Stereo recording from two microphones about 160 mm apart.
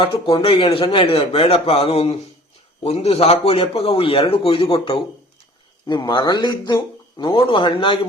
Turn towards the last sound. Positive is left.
turn(degrees=30)  # may be behind; listen again after turning